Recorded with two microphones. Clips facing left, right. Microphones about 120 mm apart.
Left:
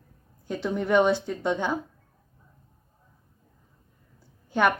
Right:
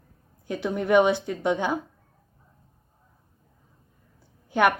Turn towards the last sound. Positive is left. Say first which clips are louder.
# right 2 dB
turn(degrees=-10)  # may be behind; listen again after turning